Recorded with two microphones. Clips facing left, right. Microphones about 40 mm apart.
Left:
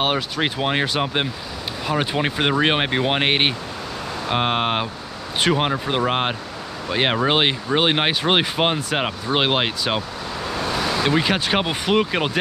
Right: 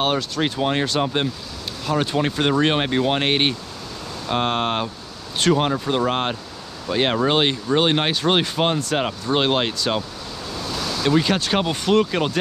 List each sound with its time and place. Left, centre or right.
0.0 s speech: centre
10.5 s speech: left